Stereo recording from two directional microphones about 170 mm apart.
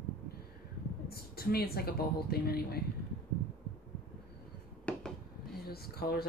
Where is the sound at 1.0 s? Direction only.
65° left (ahead or behind).